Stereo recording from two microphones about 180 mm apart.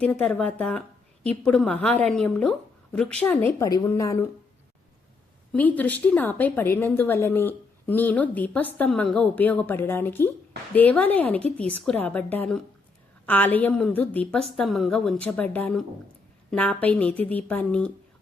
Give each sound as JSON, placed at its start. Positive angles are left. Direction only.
{"t": 0.0, "sound": "a woman's voice", "side_deg": 5}
{"t": 3.7, "sound": "a woman's voice", "side_deg": 20}
{"t": 5.5, "sound": "a woman's voice", "side_deg": 10}